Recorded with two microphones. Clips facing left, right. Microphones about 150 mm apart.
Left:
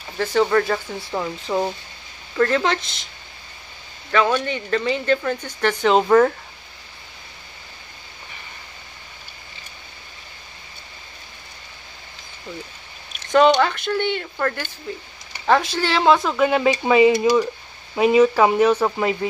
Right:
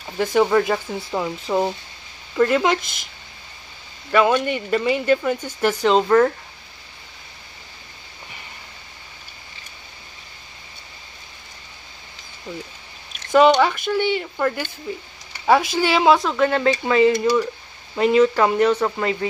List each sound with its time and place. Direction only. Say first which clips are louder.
0.2 s speech: right 1 dB; 15° right (ahead or behind)
4.1 s speech: right 2 dB; 10° right (ahead or behind)
13.5 s speech: right 1 dB; 10° right (ahead or behind); by 19.1 s 10° left (ahead or behind)